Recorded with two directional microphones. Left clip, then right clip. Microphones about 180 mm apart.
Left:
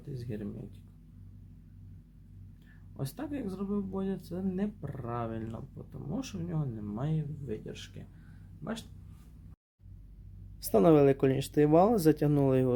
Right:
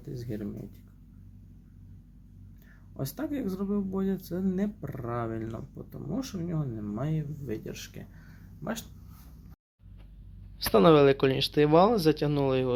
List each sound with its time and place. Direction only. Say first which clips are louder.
0.1 s a sound: right 3 dB; centre (ahead or behind)
3.0 s speech: right 5 dB; 5° right (ahead or behind)
10.7 s speech: right 3 dB; 15° left (ahead or behind)
12.2 s speech: right 1 dB; 30° left (ahead or behind)